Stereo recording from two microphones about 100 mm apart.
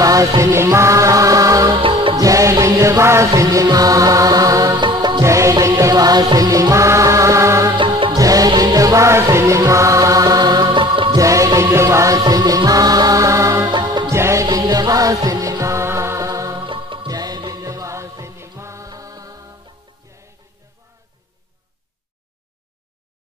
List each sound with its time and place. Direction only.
0.0 s music: 35° right (ahead or behind)
1.8 s music: 60° right (ahead or behind)
2.1 s music: 35° right (ahead or behind)
4.7 s music: 50° right (ahead or behind)
5.2 s music: 30° right (ahead or behind)
7.7 s music: 55° right (ahead or behind)
8.2 s music: 35° right (ahead or behind); by 11.1 s 55° right (ahead or behind)
11.1 s music: 35° right (ahead or behind)
13.7 s music: 50° right (ahead or behind)
14.0 s music: 30° right (ahead or behind)
16.5 s music: 55° right (ahead or behind)
17.1 s music: 40° right (ahead or behind)